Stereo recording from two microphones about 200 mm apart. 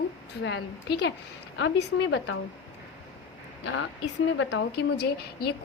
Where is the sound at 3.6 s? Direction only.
70° left (ahead or behind).